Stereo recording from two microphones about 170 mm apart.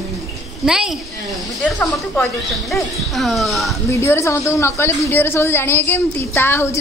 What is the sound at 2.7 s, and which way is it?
Speech, centre (ahead or behind).